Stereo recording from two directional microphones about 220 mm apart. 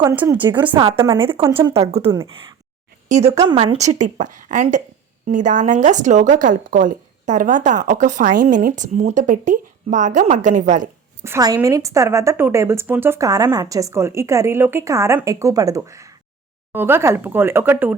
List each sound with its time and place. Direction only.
0.0 s a woman's voice: 15° right (ahead or behind)
1.7 s speech: 25° right (ahead or behind)
3.2 s a woman's voice: 15° right (ahead or behind)
3.6 s speech: 30° right (ahead or behind)
11.2 s a woman's voice: 15° right (ahead or behind)